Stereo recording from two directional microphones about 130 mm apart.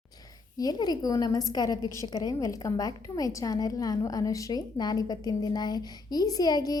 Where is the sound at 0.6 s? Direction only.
30° left (ahead or behind).